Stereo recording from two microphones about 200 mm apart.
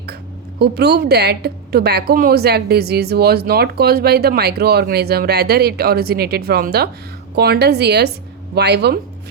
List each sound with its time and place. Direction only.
0.6 s a woman's voice: 55° right (ahead or behind)